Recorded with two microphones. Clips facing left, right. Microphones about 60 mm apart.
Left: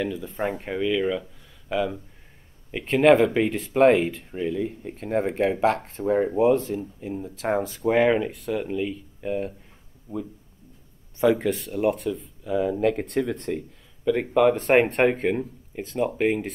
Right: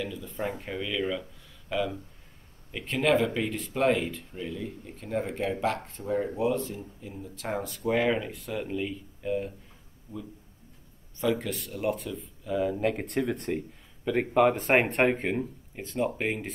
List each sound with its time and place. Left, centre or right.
0.0 s speech: left
0.6 s speech: left
2.7 s speech: left
7.6 s speech: left
8.3 s speech: centre
9.2 s speech: left
10.1 s speech: left
11.2 s speech: left
11.9 s speech: centre